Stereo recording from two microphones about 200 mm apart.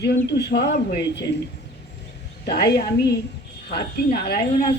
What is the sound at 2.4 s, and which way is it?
Speech, 55° left (ahead or behind).